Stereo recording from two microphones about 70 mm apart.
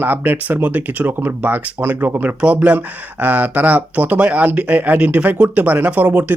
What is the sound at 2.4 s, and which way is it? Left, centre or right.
Speech, centre.